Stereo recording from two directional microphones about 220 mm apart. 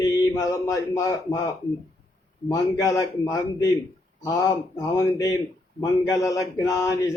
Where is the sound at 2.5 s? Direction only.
15° left (ahead or behind).